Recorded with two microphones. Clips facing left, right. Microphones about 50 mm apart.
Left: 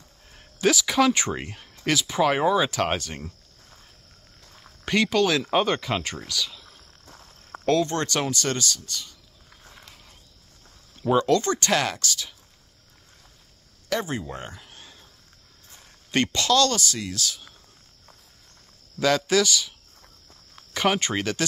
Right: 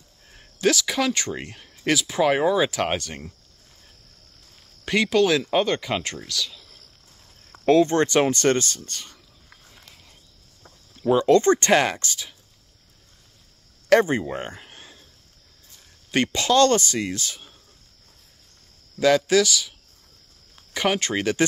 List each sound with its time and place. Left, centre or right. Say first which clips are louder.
0.3 s a sound: right 1 dB; centre
1.1 s speech: left 1 dB; centre
1.4 s speech: right 1 dB; centre
4.8 s speech: right 2 dB; centre
5.4 s speech: right 1 dB; centre
7.6 s speech: right 5 dB; right
8.3 s speech: right 6 dB; right
11.0 s a sound: right 1 dB; centre
11.2 s speech: right 5 dB; right
14.0 s speech: right 6 dB; right
16.1 s speech: right 1 dB; centre
16.5 s speech: right 5 dB; right
18.9 s speech: right 3 dB; centre